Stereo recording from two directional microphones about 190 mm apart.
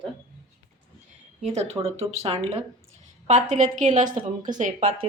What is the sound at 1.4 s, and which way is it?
A woman's voice, 35° right (ahead or behind).